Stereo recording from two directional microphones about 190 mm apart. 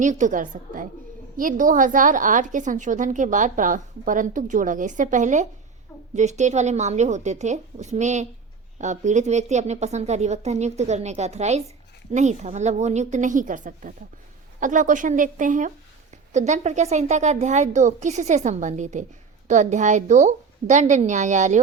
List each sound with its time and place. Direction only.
0.0 s a woman's voice: 40° right (ahead or behind)